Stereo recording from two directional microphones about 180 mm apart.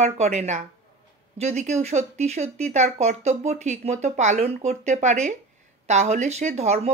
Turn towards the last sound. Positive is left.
turn(degrees=-40)  # may be behind; listen again after turning